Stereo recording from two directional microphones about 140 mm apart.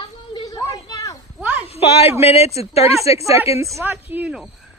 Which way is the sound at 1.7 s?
45° left (ahead or behind).